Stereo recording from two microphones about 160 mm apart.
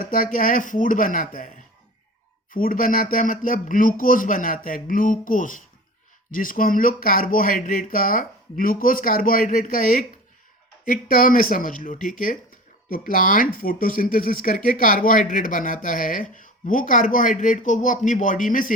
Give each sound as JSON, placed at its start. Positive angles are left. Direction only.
{"t": 0.0, "sound": "speech", "side_deg": 60}